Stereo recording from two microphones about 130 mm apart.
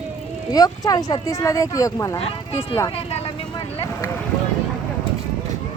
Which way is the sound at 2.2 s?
50° left (ahead or behind).